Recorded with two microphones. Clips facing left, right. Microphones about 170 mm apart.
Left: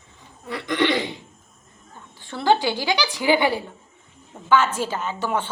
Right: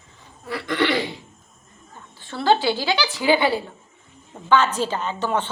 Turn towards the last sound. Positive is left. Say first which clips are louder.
# right 1 dB
turn(degrees=10)  # may be behind; listen again after turning